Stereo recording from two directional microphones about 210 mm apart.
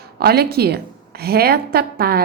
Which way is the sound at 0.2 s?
50° right (ahead or behind).